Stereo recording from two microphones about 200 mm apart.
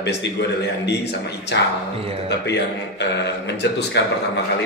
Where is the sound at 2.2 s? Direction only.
60° left (ahead or behind).